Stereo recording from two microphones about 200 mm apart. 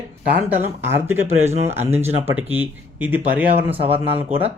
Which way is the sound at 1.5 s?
35° right (ahead or behind).